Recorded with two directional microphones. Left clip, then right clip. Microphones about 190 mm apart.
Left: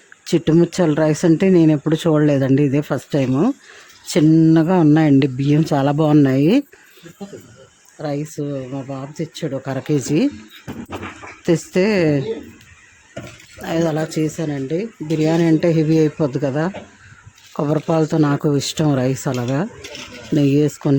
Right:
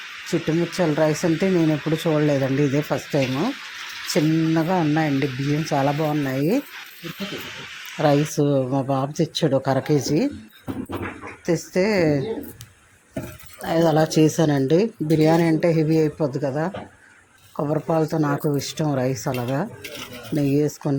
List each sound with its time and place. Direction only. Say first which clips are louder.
0.3 s speech: left 7 dB; 35° left (ahead or behind)
7.9 s speech: right 6 dB; 5° right (ahead or behind); by 9.9 s 15° left (ahead or behind)
9.9 s speech: left 3 dB; 30° left (ahead or behind)
11.4 s speech: left 4 dB; 35° left (ahead or behind)
13.6 s speech: even; 25° left (ahead or behind)
13.9 s speech: right 4 dB; 10° left (ahead or behind)
15.1 s speech: left 2 dB; 20° left (ahead or behind)